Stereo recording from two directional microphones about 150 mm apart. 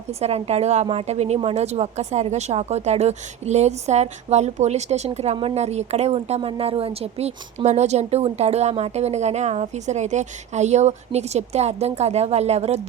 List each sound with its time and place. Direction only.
0.1 s a woman's voice: 45° right (ahead or behind)